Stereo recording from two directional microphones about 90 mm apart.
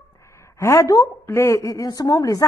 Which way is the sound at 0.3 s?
30° left (ahead or behind).